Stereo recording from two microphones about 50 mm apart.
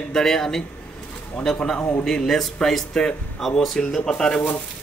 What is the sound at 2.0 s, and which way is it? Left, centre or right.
Speech, centre.